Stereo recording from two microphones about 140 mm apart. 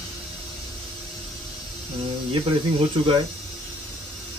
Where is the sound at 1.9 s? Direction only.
40° right (ahead or behind).